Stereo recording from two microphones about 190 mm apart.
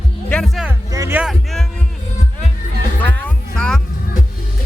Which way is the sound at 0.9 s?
15° right (ahead or behind).